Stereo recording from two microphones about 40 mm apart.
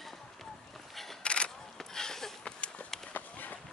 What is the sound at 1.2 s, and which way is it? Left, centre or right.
Single-lens reflex camera, left.